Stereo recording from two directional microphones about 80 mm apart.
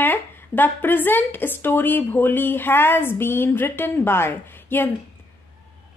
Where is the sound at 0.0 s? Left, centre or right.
Left.